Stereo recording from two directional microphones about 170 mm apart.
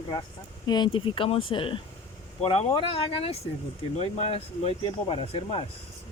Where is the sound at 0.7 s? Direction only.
25° left (ahead or behind).